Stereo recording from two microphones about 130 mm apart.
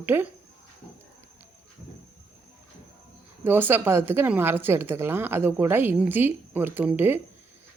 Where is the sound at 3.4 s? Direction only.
15° right (ahead or behind).